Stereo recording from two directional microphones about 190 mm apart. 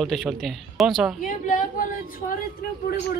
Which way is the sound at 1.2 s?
45° left (ahead or behind).